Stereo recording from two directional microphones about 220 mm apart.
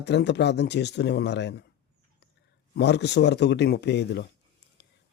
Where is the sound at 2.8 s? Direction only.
50° left (ahead or behind).